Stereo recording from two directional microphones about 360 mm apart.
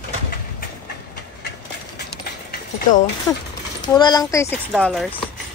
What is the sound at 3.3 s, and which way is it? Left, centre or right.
Speech, centre.